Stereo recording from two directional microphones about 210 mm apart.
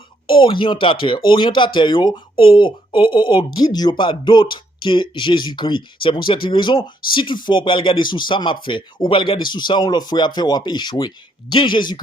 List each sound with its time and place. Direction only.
0.3 s speech: 25° left (ahead or behind)